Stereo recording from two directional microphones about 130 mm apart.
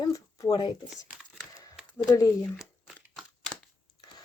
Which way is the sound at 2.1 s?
25° left (ahead or behind).